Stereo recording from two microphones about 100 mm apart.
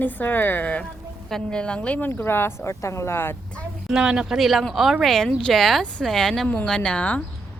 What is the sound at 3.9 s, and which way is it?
Speech, 10° right (ahead or behind).